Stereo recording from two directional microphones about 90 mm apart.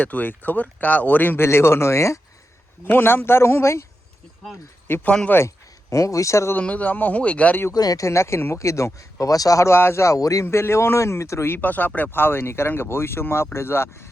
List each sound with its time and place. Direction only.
0.0 s speech: 20° left (ahead or behind)
2.8 s speech: 20° left (ahead or behind)
4.9 s speech: 25° left (ahead or behind)
5.9 s speech: 35° left (ahead or behind)
6.6 s a man's voice: 15° left (ahead or behind)
7.7 s speech: 45° left (ahead or behind); by 14.1 s 30° left (ahead or behind)